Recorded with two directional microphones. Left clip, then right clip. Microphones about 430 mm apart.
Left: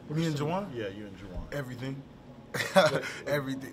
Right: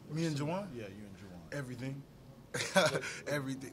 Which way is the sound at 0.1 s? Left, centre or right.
Right.